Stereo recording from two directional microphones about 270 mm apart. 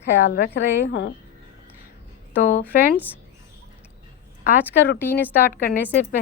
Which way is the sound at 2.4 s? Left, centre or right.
Left.